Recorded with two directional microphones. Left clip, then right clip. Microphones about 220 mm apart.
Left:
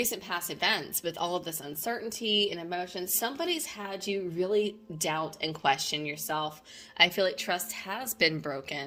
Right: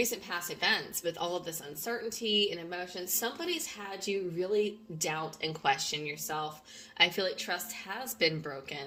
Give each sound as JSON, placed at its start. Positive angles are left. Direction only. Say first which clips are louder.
{"t": 0.0, "sound": "a woman's voice", "louder": "left 1 dB", "side_deg": 45}